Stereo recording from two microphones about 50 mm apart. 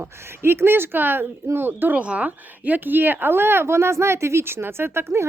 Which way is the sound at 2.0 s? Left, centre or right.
Right.